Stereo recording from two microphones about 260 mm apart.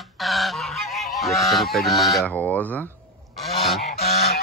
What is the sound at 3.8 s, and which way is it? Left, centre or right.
Goose, left.